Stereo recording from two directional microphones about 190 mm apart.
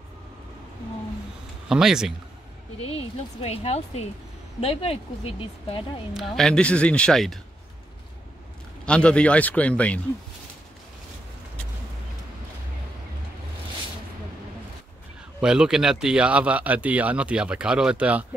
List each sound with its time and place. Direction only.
1.7 s speech: 5° right (ahead or behind)
2.9 s speech: 30° left (ahead or behind)
6.1 s speech: centre (ahead or behind)
8.8 s a man's voice: 5° left (ahead or behind)
15.4 s speech: 5° right (ahead or behind)